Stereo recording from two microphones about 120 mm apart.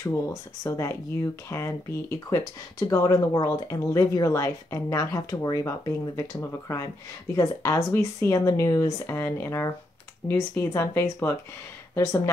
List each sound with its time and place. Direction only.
0.0 s speech: 25° left (ahead or behind)